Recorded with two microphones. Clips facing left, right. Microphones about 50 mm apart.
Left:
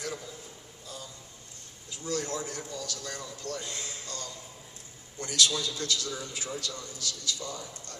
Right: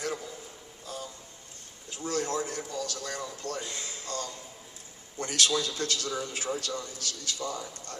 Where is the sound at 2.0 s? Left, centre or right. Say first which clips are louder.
Right 3 dB; right.